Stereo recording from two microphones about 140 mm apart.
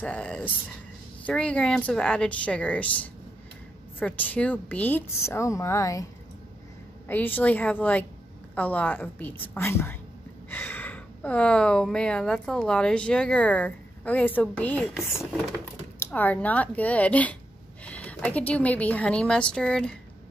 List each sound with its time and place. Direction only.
0.0 s a woman's voice: 10° left (ahead or behind)
7.1 s a woman's voice: 15° left (ahead or behind)
16.0 s a woman's voice: 10° left (ahead or behind)